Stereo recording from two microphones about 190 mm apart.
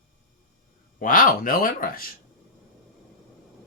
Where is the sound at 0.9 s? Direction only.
45° left (ahead or behind).